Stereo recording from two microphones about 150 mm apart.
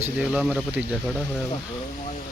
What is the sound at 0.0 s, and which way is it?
Speech, 5° right (ahead or behind).